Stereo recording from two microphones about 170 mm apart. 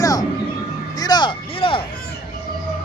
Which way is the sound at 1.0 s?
25° left (ahead or behind).